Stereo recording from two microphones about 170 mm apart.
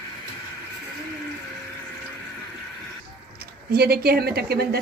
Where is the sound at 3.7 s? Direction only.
65° right (ahead or behind).